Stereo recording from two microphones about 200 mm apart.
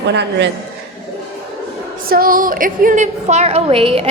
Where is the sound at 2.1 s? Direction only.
45° right (ahead or behind); by 4.0 s 30° right (ahead or behind).